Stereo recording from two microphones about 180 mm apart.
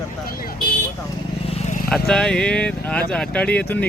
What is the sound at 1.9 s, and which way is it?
Speech, 5° left (ahead or behind).